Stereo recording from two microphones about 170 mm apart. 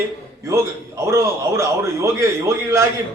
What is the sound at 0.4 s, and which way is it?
A man's voice, 15° right (ahead or behind).